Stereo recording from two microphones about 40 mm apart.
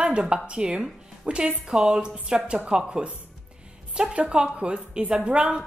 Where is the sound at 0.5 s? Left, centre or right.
Right.